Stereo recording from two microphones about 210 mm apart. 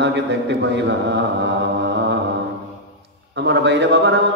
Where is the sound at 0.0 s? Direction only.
55° right (ahead or behind).